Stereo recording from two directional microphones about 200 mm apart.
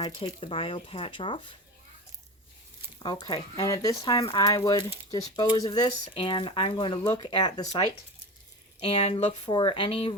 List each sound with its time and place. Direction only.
0.0 s speech: 25° left (ahead or behind)
3.0 s speech: 20° left (ahead or behind)